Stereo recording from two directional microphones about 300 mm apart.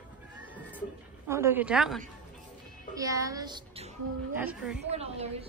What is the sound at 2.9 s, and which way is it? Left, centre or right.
A woman's voice, centre.